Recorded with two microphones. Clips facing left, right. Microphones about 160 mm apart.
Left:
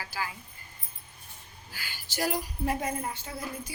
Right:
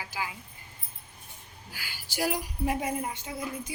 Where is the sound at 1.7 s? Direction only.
10° right (ahead or behind).